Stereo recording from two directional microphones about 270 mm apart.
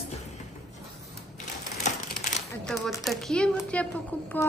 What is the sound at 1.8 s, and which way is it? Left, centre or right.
Crushing, left.